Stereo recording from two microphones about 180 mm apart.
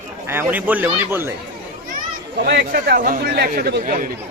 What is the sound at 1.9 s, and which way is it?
Speech, 65° right (ahead or behind).